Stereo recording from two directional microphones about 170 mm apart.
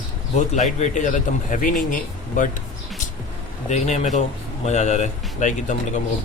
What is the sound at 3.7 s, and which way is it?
Speech, 45° left (ahead or behind).